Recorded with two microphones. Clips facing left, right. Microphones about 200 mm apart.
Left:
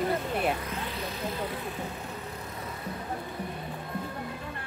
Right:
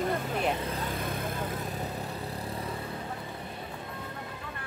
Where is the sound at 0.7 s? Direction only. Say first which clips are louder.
Right 2 dB; 45° right (ahead or behind).